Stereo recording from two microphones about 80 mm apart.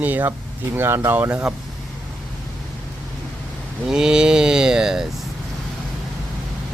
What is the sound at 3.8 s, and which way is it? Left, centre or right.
Speech, centre.